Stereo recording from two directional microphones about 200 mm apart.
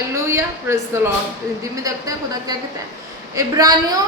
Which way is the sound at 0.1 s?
15° right (ahead or behind).